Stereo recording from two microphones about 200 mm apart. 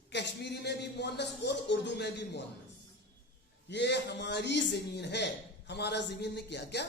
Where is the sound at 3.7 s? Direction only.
60° left (ahead or behind).